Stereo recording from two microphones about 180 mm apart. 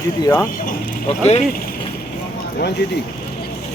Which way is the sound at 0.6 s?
50° left (ahead or behind).